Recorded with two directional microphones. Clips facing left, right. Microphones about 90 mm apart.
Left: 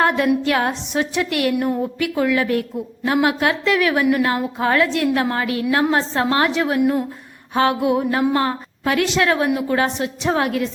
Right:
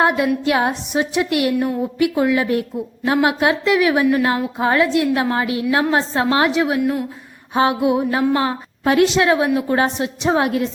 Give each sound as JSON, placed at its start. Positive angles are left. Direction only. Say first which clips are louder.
{"t": 0.4, "sound": "a woman's voice", "louder": "right 2 dB", "side_deg": -15}
{"t": 6.8, "sound": "a woman's voice", "louder": "left 2 dB", "side_deg": 25}
{"t": 7.5, "sound": "a woman's voice", "louder": "right 1 dB", "side_deg": -20}